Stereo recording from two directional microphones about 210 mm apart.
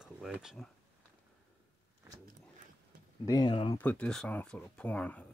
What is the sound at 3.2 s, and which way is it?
Speech, 20° left (ahead or behind).